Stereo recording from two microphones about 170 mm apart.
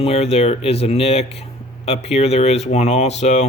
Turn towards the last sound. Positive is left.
turn(degrees=40)  # may be behind; listen again after turning